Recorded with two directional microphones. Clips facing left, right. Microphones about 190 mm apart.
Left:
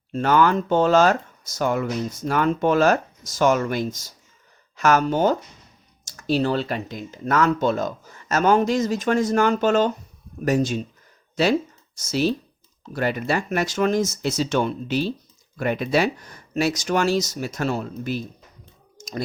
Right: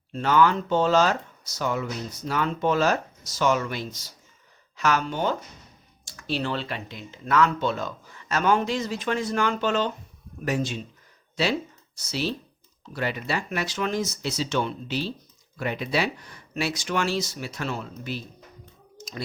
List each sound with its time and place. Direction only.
0.1 s speech: 50° left (ahead or behind)
11.9 s speech: 45° left (ahead or behind)
18.9 s clicking: 45° left (ahead or behind)